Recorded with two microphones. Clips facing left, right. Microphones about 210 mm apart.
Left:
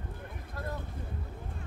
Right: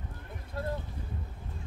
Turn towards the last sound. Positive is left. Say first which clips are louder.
# right 4 dB
turn(degrees=-30)  # may be behind; listen again after turning